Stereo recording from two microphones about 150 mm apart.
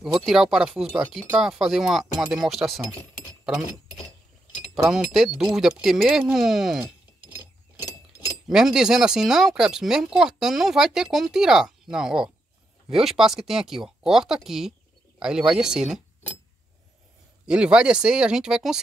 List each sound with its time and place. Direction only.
0.2 s speech: centre (ahead or behind)
4.8 s speech: 5° right (ahead or behind)
7.7 s chink: 25° left (ahead or behind)
8.5 s speech: 5° right (ahead or behind)
17.5 s speech: 5° right (ahead or behind)